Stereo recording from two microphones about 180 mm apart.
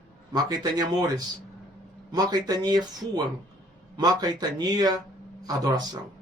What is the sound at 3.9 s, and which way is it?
Speech, 25° right (ahead or behind).